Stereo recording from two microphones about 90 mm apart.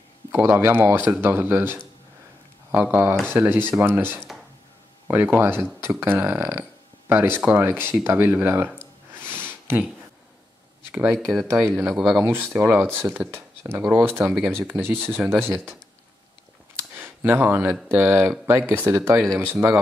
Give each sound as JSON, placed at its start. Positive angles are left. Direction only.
{"t": 0.3, "sound": "speech", "side_deg": -25}
{"t": 9.2, "sound": "a sound", "side_deg": -25}
{"t": 10.9, "sound": "speech", "side_deg": -15}
{"t": 11.5, "sound": "speech", "side_deg": 0}
{"t": 12.2, "sound": "speech", "side_deg": -25}
{"t": 16.9, "sound": "a sound", "side_deg": -20}
{"t": 17.8, "sound": "speech", "side_deg": -25}